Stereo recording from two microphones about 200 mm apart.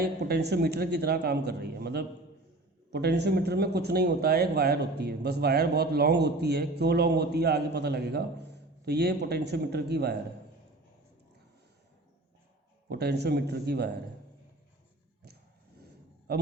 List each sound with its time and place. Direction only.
0.0 s speech: 55° right (ahead or behind)
12.9 s speech: 55° right (ahead or behind)
15.8 s a sound: 50° right (ahead or behind)